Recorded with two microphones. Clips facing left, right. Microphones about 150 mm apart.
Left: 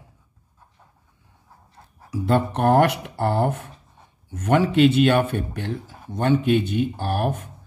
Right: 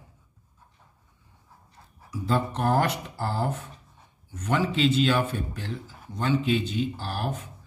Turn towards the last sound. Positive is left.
turn(degrees=55)  # may be behind; listen again after turning